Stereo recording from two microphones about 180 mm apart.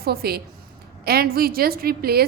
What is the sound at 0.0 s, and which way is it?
A woman's voice, 60° right (ahead or behind).